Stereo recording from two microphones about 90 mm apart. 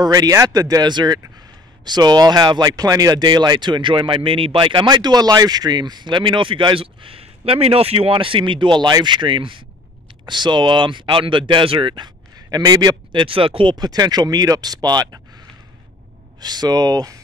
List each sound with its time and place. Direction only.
0.0 s speech: 45° right (ahead or behind); by 9.6 s 65° right (ahead or behind)
10.2 s speech: 55° right (ahead or behind)
13.1 s speech: 75° right (ahead or behind)
13.7 s speech: 50° right (ahead or behind)
16.3 s speech: 50° right (ahead or behind)